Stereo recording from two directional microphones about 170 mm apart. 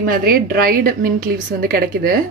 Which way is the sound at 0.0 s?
60° right (ahead or behind).